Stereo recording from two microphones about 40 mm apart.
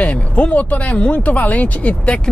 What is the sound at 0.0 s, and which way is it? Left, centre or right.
Speech, left.